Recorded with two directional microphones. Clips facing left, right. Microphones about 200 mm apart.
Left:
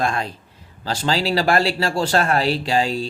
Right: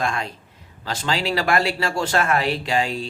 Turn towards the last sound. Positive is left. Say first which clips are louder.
# left 3 dB
turn(degrees=35)  # may be behind; listen again after turning